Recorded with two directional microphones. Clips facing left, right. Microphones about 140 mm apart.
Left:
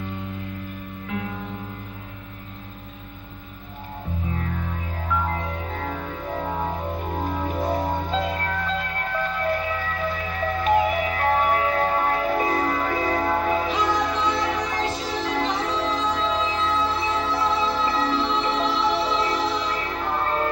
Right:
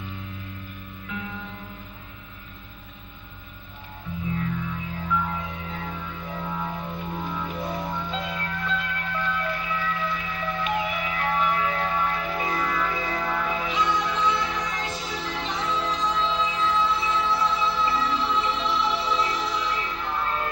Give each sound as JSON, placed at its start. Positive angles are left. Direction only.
{"t": 4.4, "sound": "music", "side_deg": 45}